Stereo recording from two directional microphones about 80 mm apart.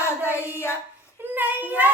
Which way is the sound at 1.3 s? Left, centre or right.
Right.